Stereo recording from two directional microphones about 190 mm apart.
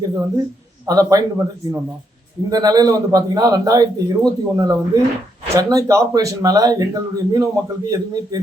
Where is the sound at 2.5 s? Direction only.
20° right (ahead or behind).